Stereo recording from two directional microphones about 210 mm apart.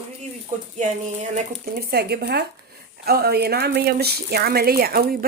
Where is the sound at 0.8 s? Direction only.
35° right (ahead or behind).